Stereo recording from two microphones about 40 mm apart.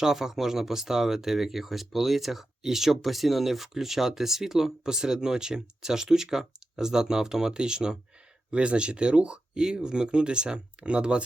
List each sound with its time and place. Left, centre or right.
0.0 s speech: centre